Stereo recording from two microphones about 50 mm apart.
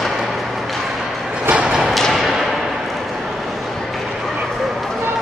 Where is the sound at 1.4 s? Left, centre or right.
Right.